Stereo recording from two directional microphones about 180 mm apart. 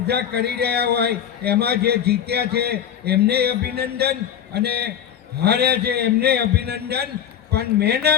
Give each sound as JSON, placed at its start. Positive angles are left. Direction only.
{"t": 0.1, "sound": "a man's voice", "side_deg": -65}